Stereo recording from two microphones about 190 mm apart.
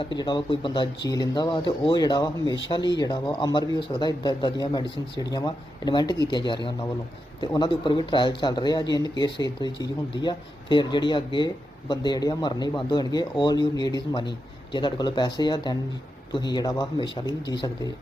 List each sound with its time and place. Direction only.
0.0 s speech: 25° left (ahead or behind)